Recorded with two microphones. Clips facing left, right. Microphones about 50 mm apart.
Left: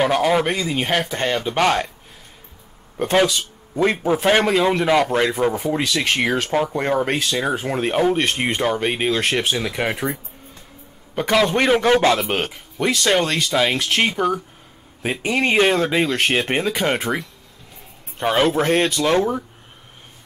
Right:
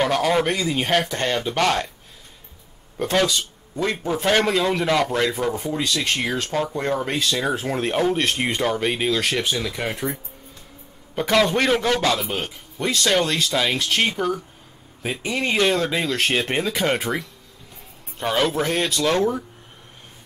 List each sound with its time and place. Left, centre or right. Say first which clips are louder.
0.0 s speech: left 2 dB; centre
3.0 s speech: left 3 dB; centre
7.2 s speech: left 1 dB; centre
11.1 s speech: left 1 dB; centre; by 12.3 s left
12.3 s speech: left 5 dB; left
13.0 s speech: even; centre
18.2 s speech: left 4 dB; centre
18.9 s speech: left 2 dB; centre